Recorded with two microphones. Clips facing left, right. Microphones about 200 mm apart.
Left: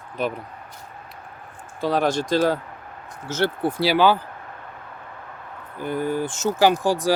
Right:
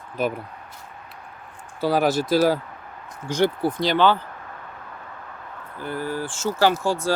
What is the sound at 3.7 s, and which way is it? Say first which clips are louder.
Speech: left 1 dB; 10° left (ahead or behind).